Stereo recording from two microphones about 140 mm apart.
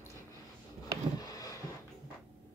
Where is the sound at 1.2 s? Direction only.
25° left (ahead or behind).